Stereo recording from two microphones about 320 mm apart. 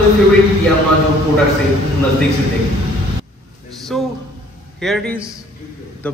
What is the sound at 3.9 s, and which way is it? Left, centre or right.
A man's voice, centre.